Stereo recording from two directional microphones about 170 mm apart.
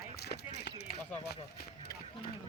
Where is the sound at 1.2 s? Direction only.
70° left (ahead or behind).